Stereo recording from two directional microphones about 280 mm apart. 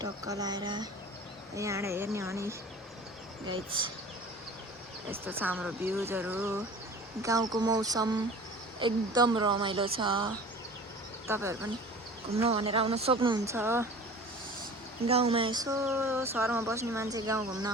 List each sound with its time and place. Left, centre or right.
0.0 s speech: centre
5.4 s speech: centre
11.3 s speech: centre
12.4 s speech: centre
15.0 s speech: right